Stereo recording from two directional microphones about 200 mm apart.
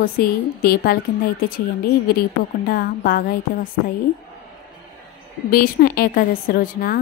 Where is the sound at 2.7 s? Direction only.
50° left (ahead or behind).